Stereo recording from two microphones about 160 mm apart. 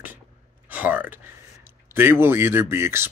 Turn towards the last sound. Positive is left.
turn(degrees=-15)  # may be behind; listen again after turning